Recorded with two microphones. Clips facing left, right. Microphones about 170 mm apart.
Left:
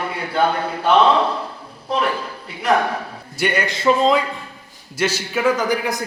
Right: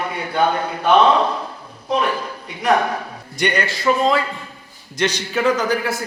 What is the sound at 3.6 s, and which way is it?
Speech, 20° left (ahead or behind).